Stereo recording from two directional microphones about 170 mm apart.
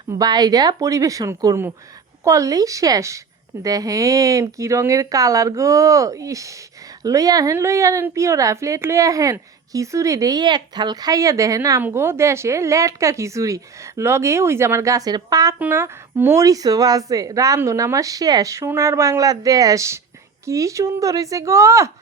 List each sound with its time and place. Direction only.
0.1 s a woman's voice: 25° right (ahead or behind)